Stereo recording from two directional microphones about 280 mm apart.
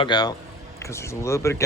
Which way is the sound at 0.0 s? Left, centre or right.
Centre.